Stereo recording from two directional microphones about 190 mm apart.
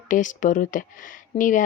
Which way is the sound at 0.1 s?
45° left (ahead or behind).